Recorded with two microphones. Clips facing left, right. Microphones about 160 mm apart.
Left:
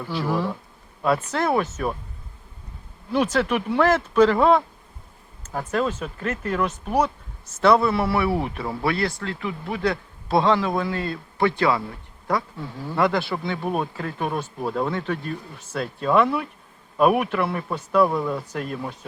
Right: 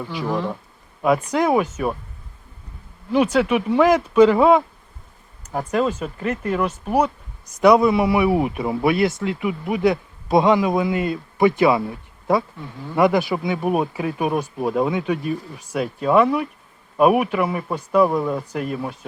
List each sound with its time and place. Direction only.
0.0 s speech: 15° right (ahead or behind)
3.1 s speech: 10° right (ahead or behind)
12.5 s speech: 10° left (ahead or behind)
13.0 s speech: 15° right (ahead or behind)